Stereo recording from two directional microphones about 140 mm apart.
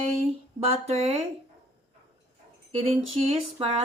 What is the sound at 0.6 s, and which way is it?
Speech, 45° right (ahead or behind).